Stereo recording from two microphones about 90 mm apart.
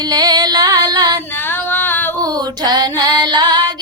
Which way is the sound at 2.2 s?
50° right (ahead or behind).